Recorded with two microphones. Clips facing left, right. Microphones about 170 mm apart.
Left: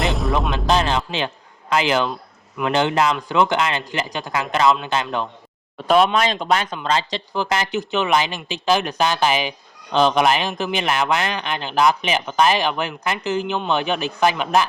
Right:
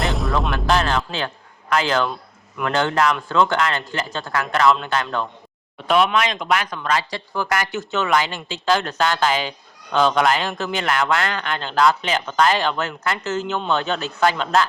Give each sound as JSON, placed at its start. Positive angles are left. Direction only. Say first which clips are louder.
{"t": 0.5, "sound": "music", "louder": "even", "side_deg": 20}
{"t": 1.7, "sound": "speech", "louder": "left 1 dB", "side_deg": 15}
{"t": 5.9, "sound": "speech", "louder": "left 2 dB", "side_deg": 35}